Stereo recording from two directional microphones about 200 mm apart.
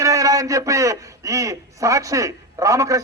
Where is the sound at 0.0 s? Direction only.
15° right (ahead or behind).